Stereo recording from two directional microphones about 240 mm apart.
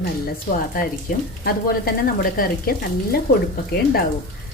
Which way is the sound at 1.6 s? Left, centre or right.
Left.